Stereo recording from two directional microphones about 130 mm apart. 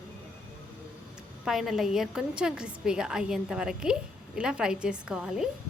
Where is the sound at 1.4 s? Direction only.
5° right (ahead or behind).